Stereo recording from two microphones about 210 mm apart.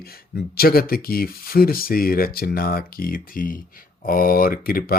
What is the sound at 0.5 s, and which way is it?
Speech, 45° left (ahead or behind).